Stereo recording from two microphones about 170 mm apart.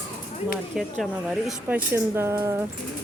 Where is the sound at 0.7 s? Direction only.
Centre (ahead or behind).